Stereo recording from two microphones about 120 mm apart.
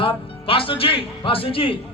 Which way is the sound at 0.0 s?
50° left (ahead or behind).